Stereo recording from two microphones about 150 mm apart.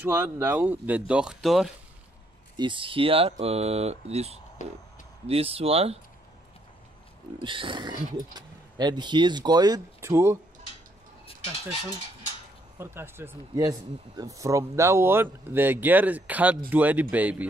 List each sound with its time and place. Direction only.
0.0 s speech: 15° right (ahead or behind)
2.5 s speech: 30° right (ahead or behind)
4.6 s speech: 55° left (ahead or behind)
5.2 s speech: 40° right (ahead or behind)
7.4 s speech: 35° right (ahead or behind); by 10.4 s 15° right (ahead or behind)
12.7 s speech: 15° right (ahead or behind)